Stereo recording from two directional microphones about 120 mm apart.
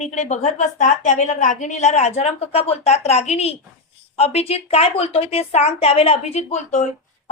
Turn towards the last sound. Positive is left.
turn(degrees=75)  # may be behind; listen again after turning